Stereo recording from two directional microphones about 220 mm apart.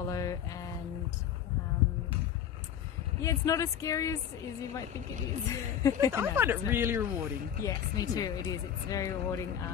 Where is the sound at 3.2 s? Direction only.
15° left (ahead or behind).